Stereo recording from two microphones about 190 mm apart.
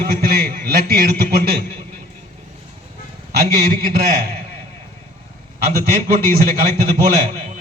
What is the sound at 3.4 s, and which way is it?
Speech, 50° right (ahead or behind).